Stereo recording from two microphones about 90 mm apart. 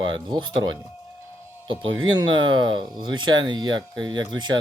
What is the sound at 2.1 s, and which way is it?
Speech, 60° right (ahead or behind).